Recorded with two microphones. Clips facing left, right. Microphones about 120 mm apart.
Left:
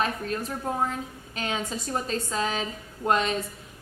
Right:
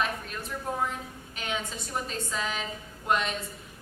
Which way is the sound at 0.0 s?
40° left (ahead or behind).